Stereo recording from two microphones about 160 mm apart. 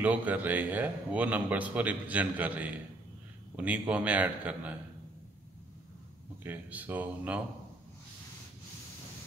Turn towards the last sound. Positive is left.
turn(degrees=-10)  # may be behind; listen again after turning